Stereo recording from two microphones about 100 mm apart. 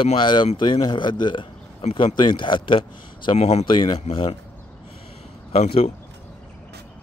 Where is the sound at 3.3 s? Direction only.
90° left.